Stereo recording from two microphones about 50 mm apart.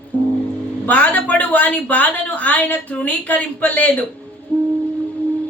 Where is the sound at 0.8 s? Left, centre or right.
Left.